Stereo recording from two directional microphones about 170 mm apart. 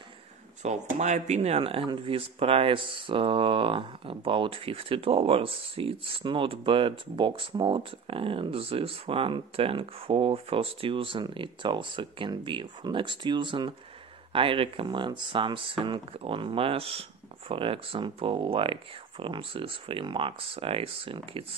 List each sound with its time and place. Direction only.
0.6 s speech: 45° right (ahead or behind)